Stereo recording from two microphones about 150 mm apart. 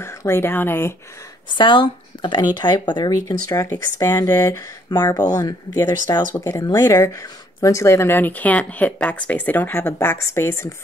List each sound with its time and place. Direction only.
0.0 s speech: 15° left (ahead or behind)
1.5 s speech: 35° left (ahead or behind)